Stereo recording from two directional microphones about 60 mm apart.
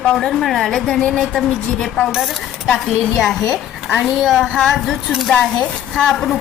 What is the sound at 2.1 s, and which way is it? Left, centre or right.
A woman's voice, centre.